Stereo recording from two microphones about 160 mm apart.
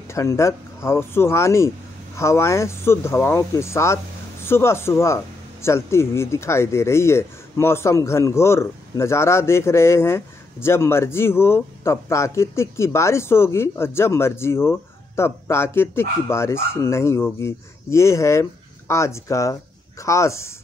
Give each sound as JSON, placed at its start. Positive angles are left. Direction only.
{"t": 0.1, "sound": "speech", "side_deg": 20}